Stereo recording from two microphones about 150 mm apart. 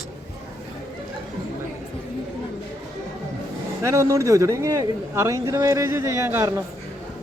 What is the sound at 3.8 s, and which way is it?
Speech, 20° right (ahead or behind).